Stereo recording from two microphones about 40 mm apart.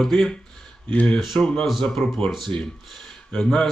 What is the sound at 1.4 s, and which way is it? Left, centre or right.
Speech, centre.